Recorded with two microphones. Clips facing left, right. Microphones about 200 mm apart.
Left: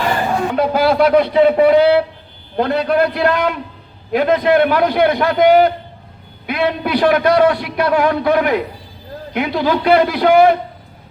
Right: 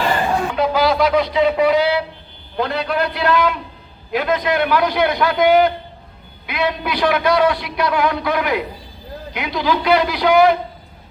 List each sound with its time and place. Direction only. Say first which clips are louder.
0.5 s a man's voice: left 4 dB; 55° left (ahead or behind)